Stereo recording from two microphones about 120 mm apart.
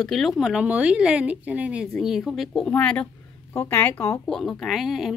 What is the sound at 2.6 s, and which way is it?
Speech, 10° left (ahead or behind).